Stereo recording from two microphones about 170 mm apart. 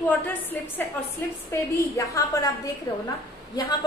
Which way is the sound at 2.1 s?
20° left (ahead or behind).